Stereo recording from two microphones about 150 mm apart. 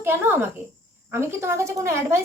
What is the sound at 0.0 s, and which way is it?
A woman's voice, 15° right (ahead or behind).